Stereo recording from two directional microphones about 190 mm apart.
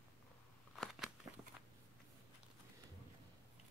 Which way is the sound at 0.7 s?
Centre (ahead or behind).